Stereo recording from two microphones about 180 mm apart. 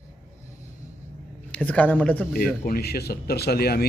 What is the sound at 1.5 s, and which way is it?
Speech, 10° left (ahead or behind).